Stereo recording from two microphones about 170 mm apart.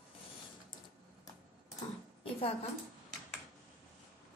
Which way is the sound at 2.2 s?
35° left (ahead or behind).